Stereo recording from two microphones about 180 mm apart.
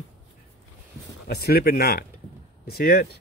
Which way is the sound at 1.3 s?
60° left (ahead or behind).